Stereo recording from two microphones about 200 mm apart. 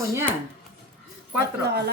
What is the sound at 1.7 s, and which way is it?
Speech, 55° right (ahead or behind).